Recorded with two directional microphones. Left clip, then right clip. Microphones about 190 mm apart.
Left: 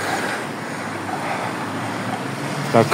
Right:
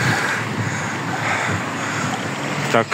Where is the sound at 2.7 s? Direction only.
10° right (ahead or behind).